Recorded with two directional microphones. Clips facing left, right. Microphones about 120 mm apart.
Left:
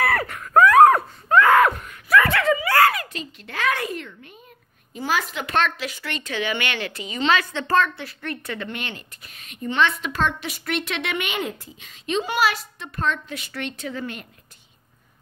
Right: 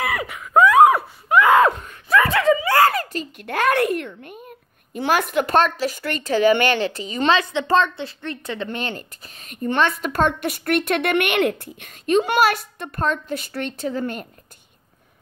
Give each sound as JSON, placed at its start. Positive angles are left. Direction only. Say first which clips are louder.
{"t": 0.0, "sound": "a sound", "louder": "left 2 dB", "side_deg": -15}
{"t": 1.6, "sound": "screaming", "louder": "right 2 dB", "side_deg": -25}
{"t": 2.9, "sound": "a sound", "louder": "right 4 dB", "side_deg": -40}
{"t": 4.9, "sound": "a woman's voice", "louder": "right 6 dB", "side_deg": -60}
{"t": 7.2, "sound": "a woman's voice", "louder": "right 3 dB", "side_deg": -20}
{"t": 8.6, "sound": "a woman's voice", "louder": "right 5 dB", "side_deg": -40}